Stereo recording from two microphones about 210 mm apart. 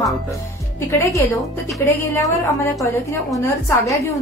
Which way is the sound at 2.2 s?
15° left (ahead or behind).